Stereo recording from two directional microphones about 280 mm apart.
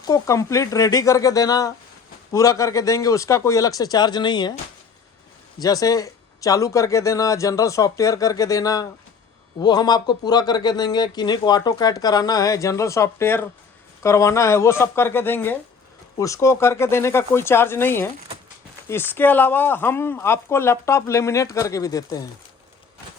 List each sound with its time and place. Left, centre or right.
0.0 s speech: centre
5.5 s speech: centre